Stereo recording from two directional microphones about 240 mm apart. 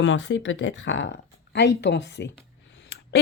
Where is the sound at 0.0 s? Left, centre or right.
Left.